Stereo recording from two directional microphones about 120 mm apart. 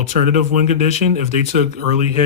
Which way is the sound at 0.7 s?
65° left (ahead or behind).